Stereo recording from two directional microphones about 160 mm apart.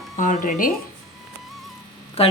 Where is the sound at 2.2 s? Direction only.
40° left (ahead or behind).